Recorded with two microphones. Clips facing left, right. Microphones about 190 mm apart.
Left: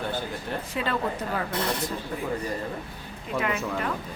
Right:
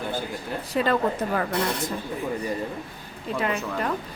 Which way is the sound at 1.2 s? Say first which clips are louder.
Right 4 dB; 55° right (ahead or behind).